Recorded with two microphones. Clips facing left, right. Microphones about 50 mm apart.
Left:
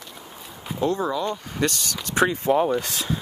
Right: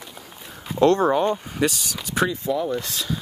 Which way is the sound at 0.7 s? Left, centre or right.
Right.